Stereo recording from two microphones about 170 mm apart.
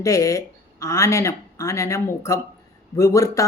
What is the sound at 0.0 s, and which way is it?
Speech, 20° left (ahead or behind).